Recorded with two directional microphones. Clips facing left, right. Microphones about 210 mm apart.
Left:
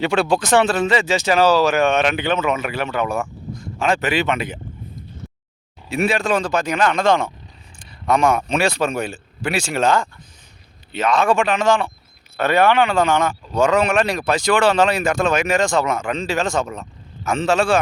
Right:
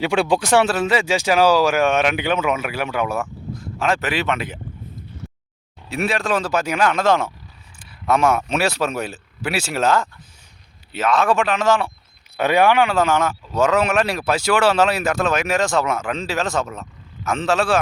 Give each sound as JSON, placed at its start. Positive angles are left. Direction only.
{"t": 0.0, "sound": "speech", "side_deg": -15}
{"t": 5.9, "sound": "speech", "side_deg": 0}